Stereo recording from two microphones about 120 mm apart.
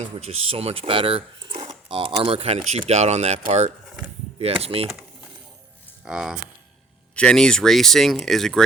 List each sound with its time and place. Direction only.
0.0 s speech: 60° right (ahead or behind)
4.6 s speech: 55° right (ahead or behind)
4.9 s coin: 5° right (ahead or behind)
6.1 s speech: 5° right (ahead or behind)
7.2 s speech: 10° left (ahead or behind)